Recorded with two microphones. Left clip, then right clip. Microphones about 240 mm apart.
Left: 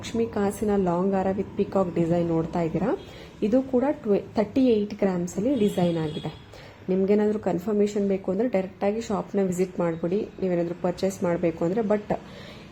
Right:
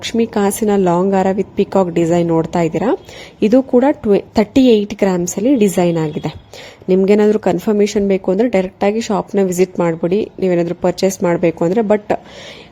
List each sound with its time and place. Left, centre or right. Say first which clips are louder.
0.0 s speech: right 10 dB; right